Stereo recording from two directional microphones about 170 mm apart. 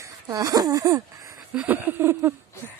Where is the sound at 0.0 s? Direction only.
20° right (ahead or behind).